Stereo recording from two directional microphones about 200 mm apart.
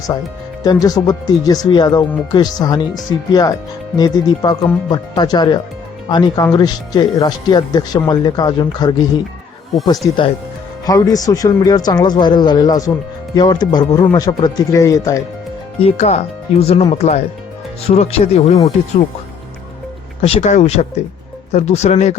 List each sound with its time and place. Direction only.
0.6 s speech: 20° left (ahead or behind)
10.8 s speech: 15° left (ahead or behind)
15.8 s speech: 30° left (ahead or behind)
20.2 s speech: 35° left (ahead or behind)